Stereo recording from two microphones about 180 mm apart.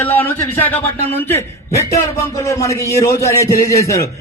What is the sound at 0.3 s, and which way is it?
A man's voice, 10° left (ahead or behind).